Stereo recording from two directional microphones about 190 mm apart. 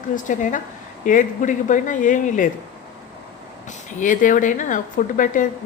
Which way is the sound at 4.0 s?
45° left (ahead or behind).